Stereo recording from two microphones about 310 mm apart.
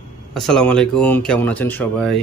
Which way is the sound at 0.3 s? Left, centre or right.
Centre.